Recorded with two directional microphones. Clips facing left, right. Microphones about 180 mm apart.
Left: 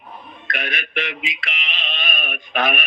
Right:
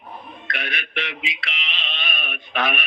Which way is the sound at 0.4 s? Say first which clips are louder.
Left 4 dB; 45° left (ahead or behind).